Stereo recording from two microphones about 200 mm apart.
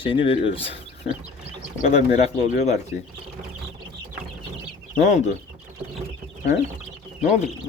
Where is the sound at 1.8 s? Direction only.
35° left (ahead or behind).